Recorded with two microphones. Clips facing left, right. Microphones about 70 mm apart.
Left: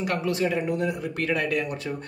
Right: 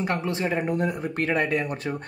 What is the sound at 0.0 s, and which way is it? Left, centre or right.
Speech, right.